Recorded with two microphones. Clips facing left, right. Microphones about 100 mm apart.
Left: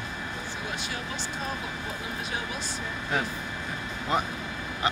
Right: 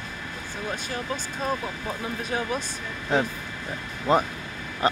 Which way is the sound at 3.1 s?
30° right (ahead or behind).